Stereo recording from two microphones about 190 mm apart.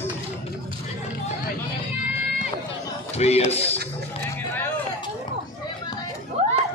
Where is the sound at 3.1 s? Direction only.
35° left (ahead or behind).